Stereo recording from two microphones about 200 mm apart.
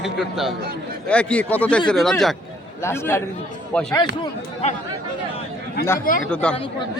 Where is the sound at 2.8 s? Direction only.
10° left (ahead or behind).